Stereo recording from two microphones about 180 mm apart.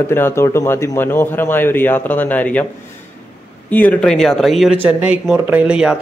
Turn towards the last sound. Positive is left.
turn(degrees=-5)  # may be behind; listen again after turning